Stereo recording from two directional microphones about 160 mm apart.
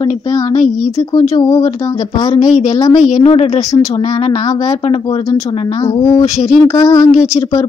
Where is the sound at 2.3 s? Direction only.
45° left (ahead or behind).